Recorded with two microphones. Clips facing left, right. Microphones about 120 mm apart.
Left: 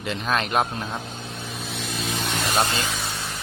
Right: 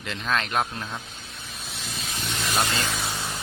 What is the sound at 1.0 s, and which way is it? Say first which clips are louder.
Vehicle: left 7 dB; 65° left (ahead or behind).